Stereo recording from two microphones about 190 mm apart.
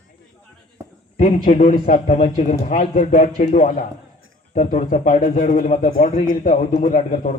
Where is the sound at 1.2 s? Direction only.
45° left (ahead or behind).